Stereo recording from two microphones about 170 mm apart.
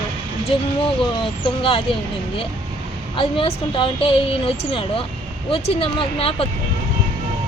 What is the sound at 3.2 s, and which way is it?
Speech, 30° left (ahead or behind).